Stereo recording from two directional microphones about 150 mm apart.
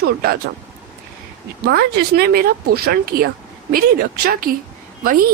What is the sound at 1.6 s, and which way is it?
Speech, 90° right.